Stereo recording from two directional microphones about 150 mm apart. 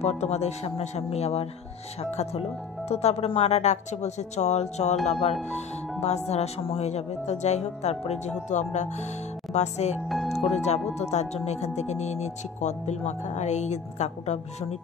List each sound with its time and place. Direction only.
0.0 s speech: 45° left (ahead or behind)
10.0 s speech: centre (ahead or behind)
10.5 s speech: 50° left (ahead or behind)